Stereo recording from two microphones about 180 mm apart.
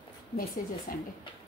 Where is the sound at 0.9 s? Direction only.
55° left (ahead or behind).